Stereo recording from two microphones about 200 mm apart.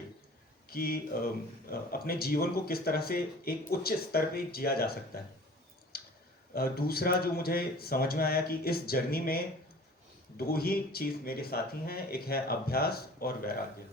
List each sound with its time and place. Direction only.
0.7 s speech: 50° left (ahead or behind)
5.9 s clicking: 50° left (ahead or behind)
6.5 s speech: 50° left (ahead or behind)